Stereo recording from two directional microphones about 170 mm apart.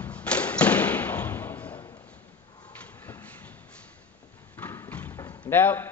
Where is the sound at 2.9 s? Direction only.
10° left (ahead or behind).